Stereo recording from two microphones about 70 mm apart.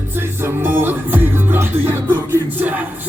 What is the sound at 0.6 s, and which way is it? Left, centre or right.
Music, right.